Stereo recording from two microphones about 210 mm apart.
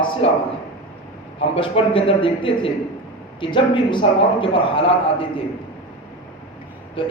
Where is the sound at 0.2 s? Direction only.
25° left (ahead or behind).